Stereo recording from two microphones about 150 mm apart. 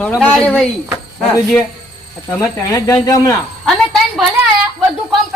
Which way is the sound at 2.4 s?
20° left (ahead or behind).